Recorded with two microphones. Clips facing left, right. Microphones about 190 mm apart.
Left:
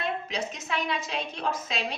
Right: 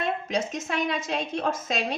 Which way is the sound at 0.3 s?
45° right (ahead or behind).